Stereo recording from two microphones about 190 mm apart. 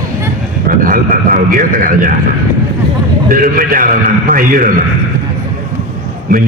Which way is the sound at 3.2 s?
45° right (ahead or behind).